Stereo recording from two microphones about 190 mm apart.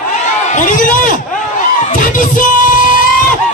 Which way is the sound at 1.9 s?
45° left (ahead or behind).